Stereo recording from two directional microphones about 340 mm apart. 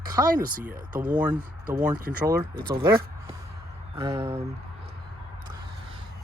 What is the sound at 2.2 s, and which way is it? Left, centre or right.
Speech, centre.